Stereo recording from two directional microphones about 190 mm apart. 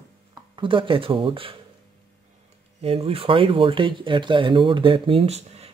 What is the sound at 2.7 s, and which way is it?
Speech, 30° right (ahead or behind).